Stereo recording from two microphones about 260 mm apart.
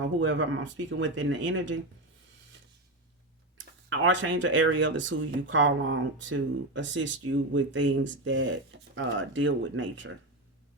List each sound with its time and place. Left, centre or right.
0.2 s speech: right
3.8 s speech: right